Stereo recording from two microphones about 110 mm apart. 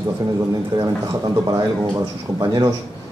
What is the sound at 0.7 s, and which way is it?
A man's voice, 35° right (ahead or behind).